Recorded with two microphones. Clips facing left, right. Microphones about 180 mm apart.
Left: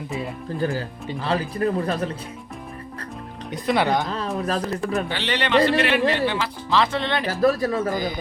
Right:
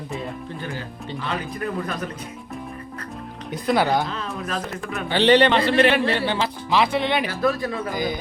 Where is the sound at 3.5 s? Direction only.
Centre (ahead or behind).